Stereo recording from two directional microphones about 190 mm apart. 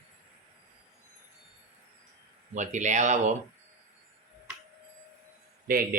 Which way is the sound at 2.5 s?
40° right (ahead or behind).